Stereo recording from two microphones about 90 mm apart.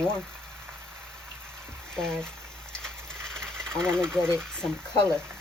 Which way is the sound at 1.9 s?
5° left (ahead or behind).